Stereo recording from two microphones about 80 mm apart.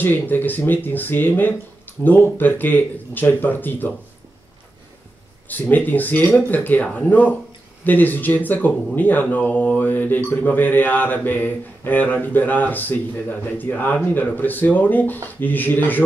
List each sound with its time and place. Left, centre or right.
0.0 s speech: left
5.5 s speech: left